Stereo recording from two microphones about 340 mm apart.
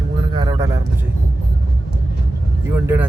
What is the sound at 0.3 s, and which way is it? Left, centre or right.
Vehicle, centre.